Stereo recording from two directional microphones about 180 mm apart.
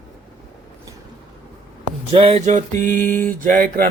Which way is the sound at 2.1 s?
35° right (ahead or behind).